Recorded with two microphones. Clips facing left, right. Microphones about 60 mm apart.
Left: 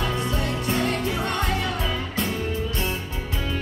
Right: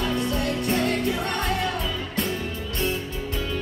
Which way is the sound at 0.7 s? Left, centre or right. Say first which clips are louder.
Even; left.